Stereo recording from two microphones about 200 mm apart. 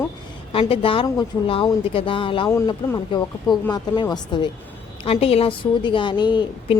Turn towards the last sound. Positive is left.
turn(degrees=25)  # may be behind; listen again after turning